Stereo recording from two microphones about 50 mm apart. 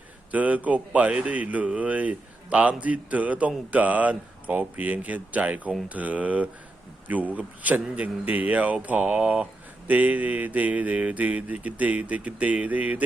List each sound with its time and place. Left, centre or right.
0.3 s speech: right
4.5 s mantra: right
7.9 s speech: right
9.8 s mantra: right